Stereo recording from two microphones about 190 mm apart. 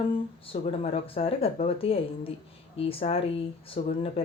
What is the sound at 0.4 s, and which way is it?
Speech, 30° left (ahead or behind).